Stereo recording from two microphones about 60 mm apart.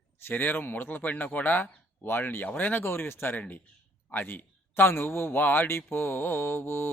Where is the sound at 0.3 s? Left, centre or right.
Left.